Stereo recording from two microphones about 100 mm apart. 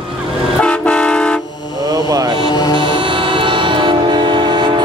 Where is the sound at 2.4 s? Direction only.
45° left (ahead or behind).